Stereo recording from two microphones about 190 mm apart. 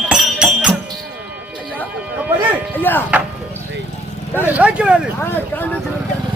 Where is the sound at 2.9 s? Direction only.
10° left (ahead or behind).